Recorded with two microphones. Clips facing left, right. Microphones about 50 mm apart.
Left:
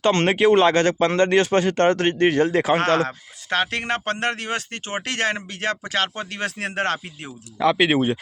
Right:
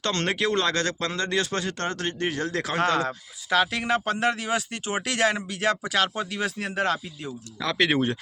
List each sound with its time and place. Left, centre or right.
0.0 s speech: left
2.5 s speech: left
2.7 s speech: left
6.6 s speech: left
7.8 s speech: centre